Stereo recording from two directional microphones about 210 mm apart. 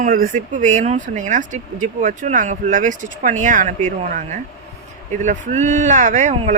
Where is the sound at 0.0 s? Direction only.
40° right (ahead or behind).